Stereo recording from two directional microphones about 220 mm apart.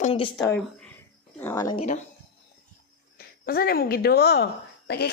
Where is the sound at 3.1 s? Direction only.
45° left (ahead or behind).